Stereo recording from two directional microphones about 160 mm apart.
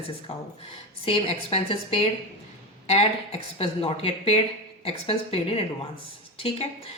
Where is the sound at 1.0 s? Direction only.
40° left (ahead or behind).